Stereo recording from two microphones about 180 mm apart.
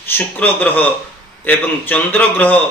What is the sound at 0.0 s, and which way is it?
Speech, 10° left (ahead or behind).